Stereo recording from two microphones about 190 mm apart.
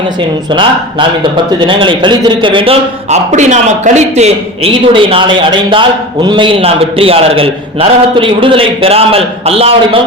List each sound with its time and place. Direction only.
0.5 s a man's voice: 25° right (ahead or behind)